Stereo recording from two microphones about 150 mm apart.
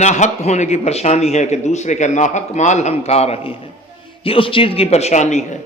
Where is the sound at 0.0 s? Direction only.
50° left (ahead or behind).